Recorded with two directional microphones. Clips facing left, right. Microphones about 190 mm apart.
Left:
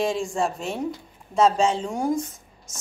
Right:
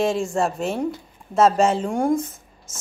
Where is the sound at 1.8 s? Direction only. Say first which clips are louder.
Right 4 dB; 55° right (ahead or behind).